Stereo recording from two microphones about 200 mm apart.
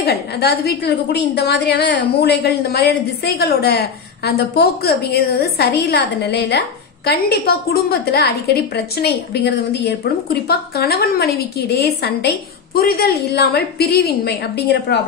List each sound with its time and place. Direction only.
0.0 s a woman's voice: 55° left (ahead or behind)